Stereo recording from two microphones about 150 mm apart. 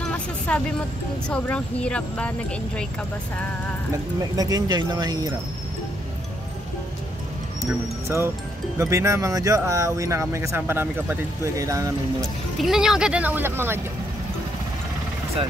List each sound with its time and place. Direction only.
0.5 s speech: 5° left (ahead or behind)
3.9 s speech: 25° right (ahead or behind)
8.7 s speech: 20° right (ahead or behind)
12.5 s speech: centre (ahead or behind)